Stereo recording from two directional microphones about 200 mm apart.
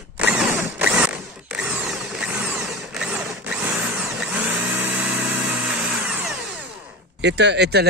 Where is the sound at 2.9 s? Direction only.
5° right (ahead or behind).